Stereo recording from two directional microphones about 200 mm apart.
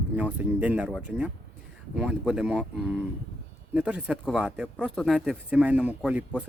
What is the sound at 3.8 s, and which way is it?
Speech, 5° right (ahead or behind).